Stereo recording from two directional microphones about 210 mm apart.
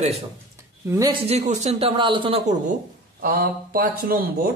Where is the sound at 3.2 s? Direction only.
45° right (ahead or behind).